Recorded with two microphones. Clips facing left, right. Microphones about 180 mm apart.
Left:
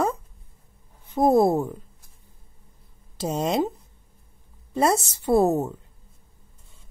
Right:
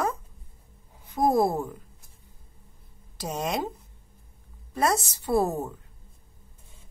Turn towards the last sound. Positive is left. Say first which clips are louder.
# left 5 dB
turn(degrees=25)  # may be behind; listen again after turning